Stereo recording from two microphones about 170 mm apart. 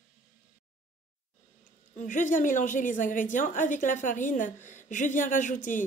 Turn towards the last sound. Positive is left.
turn(degrees=50)  # may be behind; listen again after turning